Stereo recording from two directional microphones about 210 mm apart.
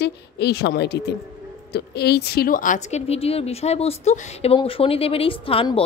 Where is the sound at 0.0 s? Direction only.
50° left (ahead or behind).